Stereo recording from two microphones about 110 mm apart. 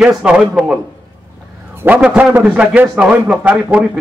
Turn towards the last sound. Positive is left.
turn(degrees=-10)  # may be behind; listen again after turning